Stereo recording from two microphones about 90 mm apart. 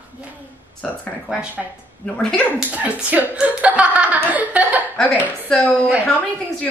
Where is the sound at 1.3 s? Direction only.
10° right (ahead or behind).